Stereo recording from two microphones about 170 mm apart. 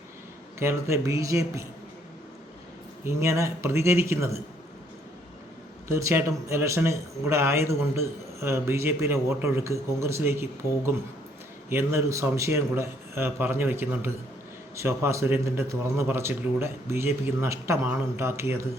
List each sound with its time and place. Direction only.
0.6 s a man's voice: 15° right (ahead or behind)
3.0 s a man's voice: 15° right (ahead or behind)
5.9 s a man's voice: 15° right (ahead or behind)